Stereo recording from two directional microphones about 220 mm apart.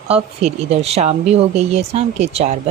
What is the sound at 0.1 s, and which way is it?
Speech, 30° right (ahead or behind).